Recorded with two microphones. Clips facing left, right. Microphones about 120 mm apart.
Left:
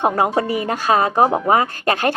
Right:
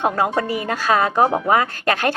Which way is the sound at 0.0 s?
25° left (ahead or behind).